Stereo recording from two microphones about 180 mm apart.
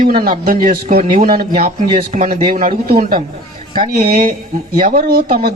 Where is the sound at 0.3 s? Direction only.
50° right (ahead or behind).